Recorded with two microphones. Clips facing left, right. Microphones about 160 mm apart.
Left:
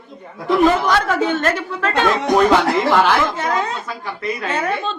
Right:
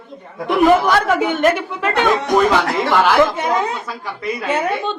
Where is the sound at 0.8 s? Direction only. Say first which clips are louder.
Right 2 dB; 10° right (ahead or behind).